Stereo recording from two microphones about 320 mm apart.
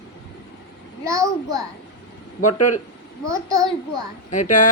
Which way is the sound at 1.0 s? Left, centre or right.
Centre.